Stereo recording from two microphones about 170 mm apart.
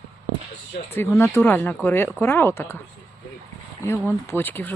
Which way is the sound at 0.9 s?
15° left (ahead or behind).